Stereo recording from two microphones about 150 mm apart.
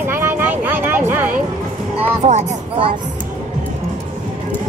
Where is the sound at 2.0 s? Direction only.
45° right (ahead or behind).